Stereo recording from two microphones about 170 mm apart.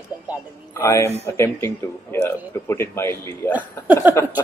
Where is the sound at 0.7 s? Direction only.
15° left (ahead or behind).